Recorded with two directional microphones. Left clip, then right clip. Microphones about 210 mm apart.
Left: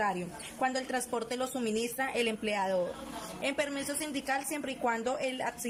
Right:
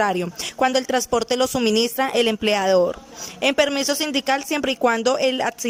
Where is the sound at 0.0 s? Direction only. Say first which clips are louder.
Right 11 dB; 40° right (ahead or behind).